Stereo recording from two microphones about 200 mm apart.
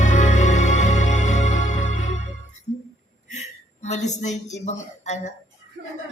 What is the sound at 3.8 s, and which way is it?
Speech, 35° left (ahead or behind).